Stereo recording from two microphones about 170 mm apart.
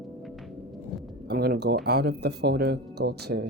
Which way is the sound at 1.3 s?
65° right (ahead or behind).